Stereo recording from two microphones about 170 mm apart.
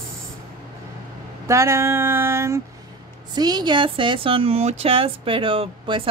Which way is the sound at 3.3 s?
25° right (ahead or behind).